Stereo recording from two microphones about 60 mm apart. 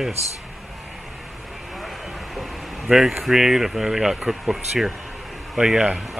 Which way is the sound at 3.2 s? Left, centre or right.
Centre.